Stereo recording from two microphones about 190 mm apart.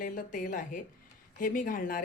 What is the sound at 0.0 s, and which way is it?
Speech, 45° left (ahead or behind).